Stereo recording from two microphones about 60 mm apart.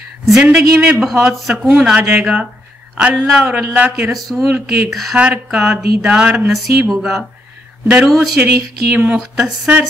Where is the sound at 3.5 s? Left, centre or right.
Right.